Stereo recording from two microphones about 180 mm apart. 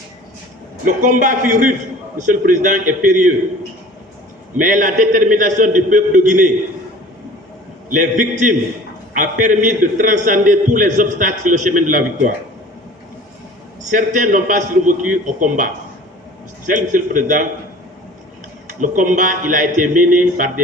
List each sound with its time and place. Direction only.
0.9 s a man's voice: 45° right (ahead or behind)
4.5 s a man's voice: 45° right (ahead or behind)
7.9 s a man's voice: 45° right (ahead or behind)
13.9 s a man's voice: 45° right (ahead or behind)
16.6 s a man's voice: 45° right (ahead or behind)
18.7 s a man's voice: 45° right (ahead or behind)